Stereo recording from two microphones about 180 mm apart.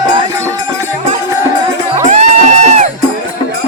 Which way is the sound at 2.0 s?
40° right (ahead or behind).